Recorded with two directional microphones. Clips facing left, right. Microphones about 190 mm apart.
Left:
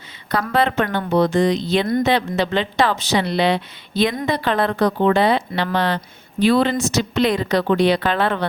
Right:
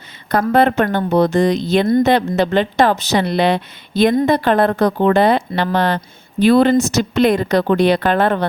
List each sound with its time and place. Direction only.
0.3 s a woman's voice: 50° right (ahead or behind)